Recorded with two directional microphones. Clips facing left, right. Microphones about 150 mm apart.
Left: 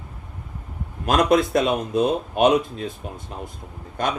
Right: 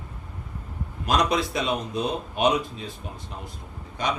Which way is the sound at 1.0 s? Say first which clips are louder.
Left 5 dB; 50° left (ahead or behind).